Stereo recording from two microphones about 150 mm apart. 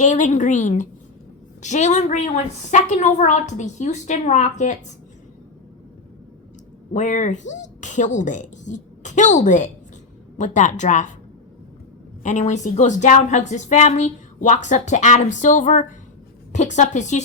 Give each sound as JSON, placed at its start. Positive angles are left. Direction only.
{"t": 0.0, "sound": "a woman's voice", "side_deg": 55}
{"t": 6.9, "sound": "a woman's voice", "side_deg": 55}
{"t": 12.2, "sound": "a woman's voice", "side_deg": 55}